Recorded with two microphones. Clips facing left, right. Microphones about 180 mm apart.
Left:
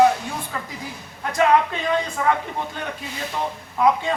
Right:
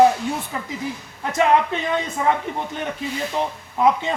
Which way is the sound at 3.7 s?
25° right (ahead or behind).